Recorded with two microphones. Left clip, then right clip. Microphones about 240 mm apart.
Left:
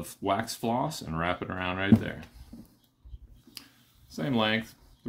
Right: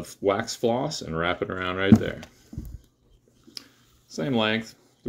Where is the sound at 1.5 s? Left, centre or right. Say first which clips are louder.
Right 5 dB; centre.